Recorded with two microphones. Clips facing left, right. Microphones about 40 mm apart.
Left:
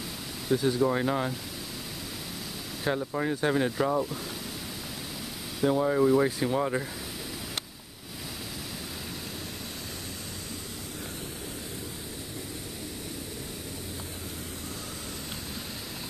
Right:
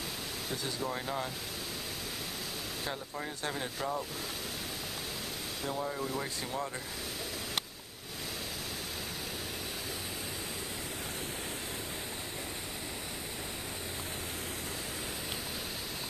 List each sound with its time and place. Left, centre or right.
0.5 s speech: centre
2.9 s speech: left
5.7 s speech: left